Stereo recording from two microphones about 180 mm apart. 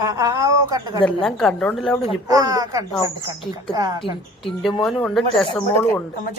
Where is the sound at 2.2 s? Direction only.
20° right (ahead or behind).